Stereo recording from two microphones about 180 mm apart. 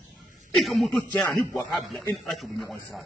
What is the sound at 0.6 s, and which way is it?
A man's voice, centre (ahead or behind).